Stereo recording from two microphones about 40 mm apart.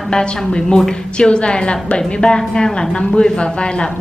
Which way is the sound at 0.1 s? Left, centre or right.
Centre.